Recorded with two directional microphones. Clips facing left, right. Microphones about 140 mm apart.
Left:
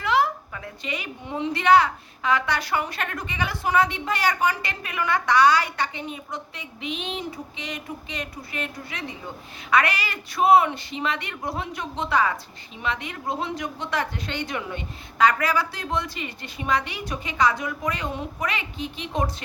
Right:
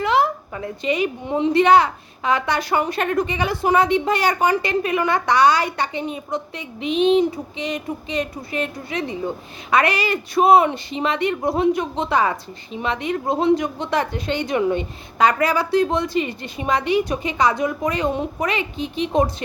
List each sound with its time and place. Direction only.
0.0 s a woman's voice: 20° right (ahead or behind)